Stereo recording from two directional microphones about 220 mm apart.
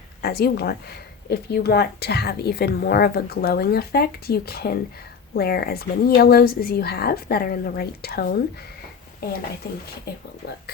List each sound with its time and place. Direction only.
0.2 s a woman's voice: 45° left (ahead or behind)